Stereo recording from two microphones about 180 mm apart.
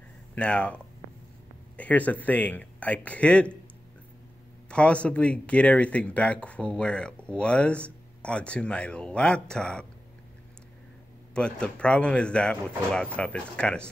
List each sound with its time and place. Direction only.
0.3 s speech: 5° left (ahead or behind)
1.8 s speech: 10° left (ahead or behind)
4.6 s speech: 5° left (ahead or behind)
11.3 s speech: 5° left (ahead or behind)